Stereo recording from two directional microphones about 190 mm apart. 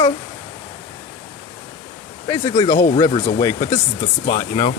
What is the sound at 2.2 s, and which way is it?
Speech, 15° left (ahead or behind).